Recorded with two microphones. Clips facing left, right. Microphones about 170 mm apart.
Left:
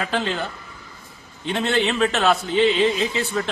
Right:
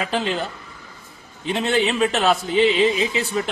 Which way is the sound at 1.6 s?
15° right (ahead or behind).